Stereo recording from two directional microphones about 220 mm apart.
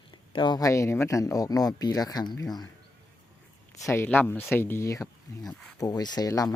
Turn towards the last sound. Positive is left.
turn(degrees=15)  # may be behind; listen again after turning